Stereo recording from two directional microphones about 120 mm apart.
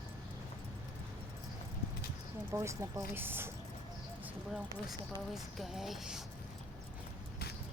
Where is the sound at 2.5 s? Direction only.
25° right (ahead or behind).